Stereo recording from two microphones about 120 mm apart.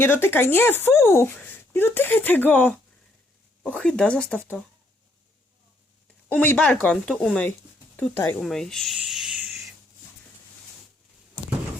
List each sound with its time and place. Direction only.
0.0 s speech: 20° left (ahead or behind)
6.2 s speech: 15° left (ahead or behind)
8.4 s speech: 5° left (ahead or behind)
9.0 s a sound: 5° right (ahead or behind)